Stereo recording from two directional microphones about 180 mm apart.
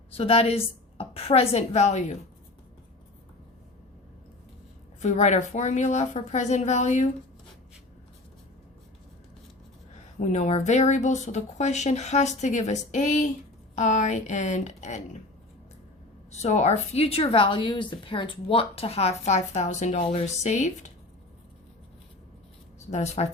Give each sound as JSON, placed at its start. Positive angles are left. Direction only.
{"t": 0.1, "sound": "a woman's voice", "side_deg": 35}
{"t": 4.9, "sound": "a woman's voice", "side_deg": 40}
{"t": 10.2, "sound": "a woman's voice", "side_deg": 40}
{"t": 16.3, "sound": "a woman's voice", "side_deg": 40}
{"t": 22.9, "sound": "a woman's voice", "side_deg": 35}